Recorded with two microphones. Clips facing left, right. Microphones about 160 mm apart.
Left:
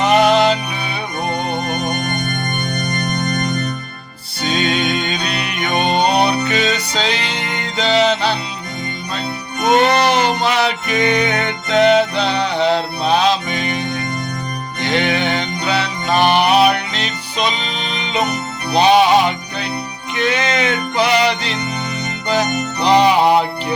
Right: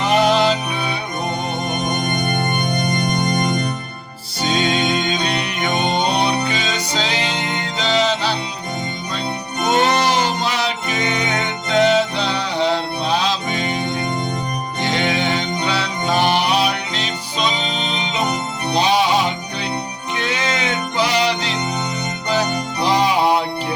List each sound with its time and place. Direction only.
0.0 s music: 65° left (ahead or behind)
2.3 s music: 20° right (ahead or behind)
4.4 s music: 60° left (ahead or behind)
9.6 s music: 60° left (ahead or behind)
22.8 s music: 70° left (ahead or behind)